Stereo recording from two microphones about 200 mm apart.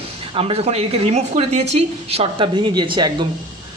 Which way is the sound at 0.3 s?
25° right (ahead or behind).